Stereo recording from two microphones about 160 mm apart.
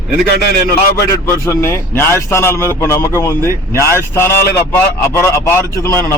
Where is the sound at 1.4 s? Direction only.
15° left (ahead or behind).